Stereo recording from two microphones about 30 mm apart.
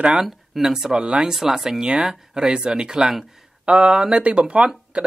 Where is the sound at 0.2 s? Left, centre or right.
Centre.